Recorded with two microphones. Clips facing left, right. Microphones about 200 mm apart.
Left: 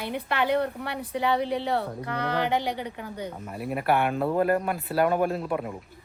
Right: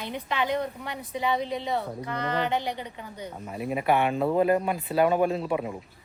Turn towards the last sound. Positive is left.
turn(degrees=0)  # may be behind; listen again after turning